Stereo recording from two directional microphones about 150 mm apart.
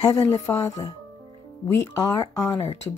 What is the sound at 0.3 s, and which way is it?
Speech, 15° left (ahead or behind).